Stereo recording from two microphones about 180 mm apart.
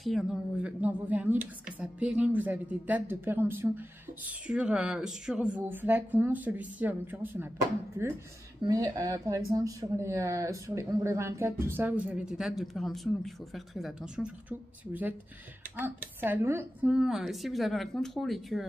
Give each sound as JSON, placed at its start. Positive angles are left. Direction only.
{"t": 0.0, "sound": "a woman's voice", "side_deg": 0}